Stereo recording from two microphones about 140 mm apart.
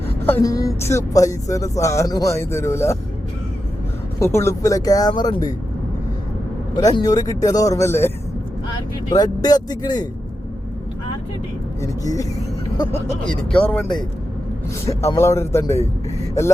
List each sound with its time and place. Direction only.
0.4 s speech: 25° left (ahead or behind)
4.2 s speech: 20° left (ahead or behind)
6.7 s speech: 30° left (ahead or behind)
9.0 s speech: 30° left (ahead or behind)
11.8 s speech: 25° left (ahead or behind)
13.2 s speech: 5° left (ahead or behind)
14.8 s speech: 20° left (ahead or behind)